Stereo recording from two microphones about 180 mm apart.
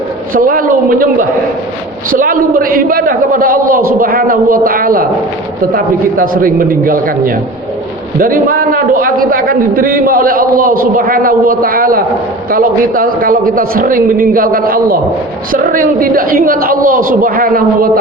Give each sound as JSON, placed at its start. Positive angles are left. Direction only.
{"t": 0.3, "sound": "a man's voice", "side_deg": -50}